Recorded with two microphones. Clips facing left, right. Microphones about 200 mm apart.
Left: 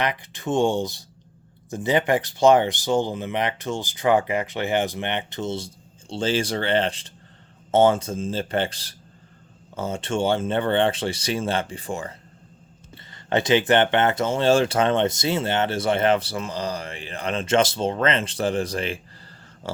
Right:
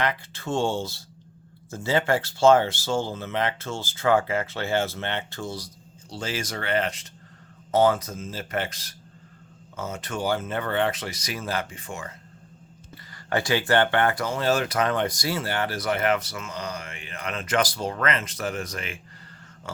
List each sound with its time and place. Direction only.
0.0 s speech: 15° left (ahead or behind); by 12.1 s 30° left (ahead or behind)
13.1 s speech: 20° left (ahead or behind)
19.6 s dog: 30° left (ahead or behind)